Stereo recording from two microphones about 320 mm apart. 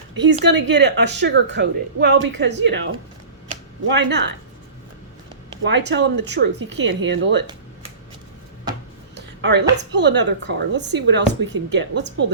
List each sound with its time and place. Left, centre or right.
0.2 s a woman's voice: right
5.6 s a woman's voice: right
9.1 s a woman's voice: right